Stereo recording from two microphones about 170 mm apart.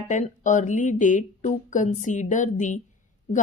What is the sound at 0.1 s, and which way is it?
A woman's voice, 45° left (ahead or behind).